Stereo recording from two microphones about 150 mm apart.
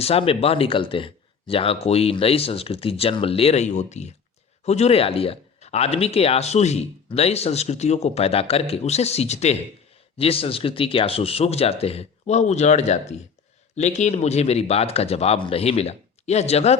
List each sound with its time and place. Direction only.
0.0 s speech: 40° left (ahead or behind)